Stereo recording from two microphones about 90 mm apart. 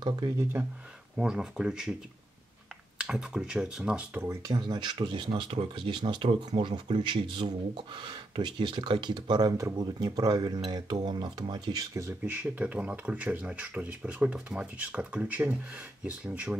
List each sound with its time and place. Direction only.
0.0 s speech: 55° right (ahead or behind)
0.4 s speech: 25° right (ahead or behind)
1.1 s speech: 10° right (ahead or behind)
3.0 s speech: 10° right (ahead or behind)
4.1 s speech: 25° right (ahead or behind)
4.5 s speech: 55° right (ahead or behind)
9.5 s speech: 35° right (ahead or behind)
12.3 s speech: 20° right (ahead or behind)